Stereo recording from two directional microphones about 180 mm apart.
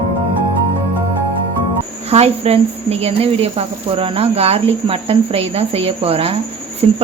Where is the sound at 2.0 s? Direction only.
35° right (ahead or behind).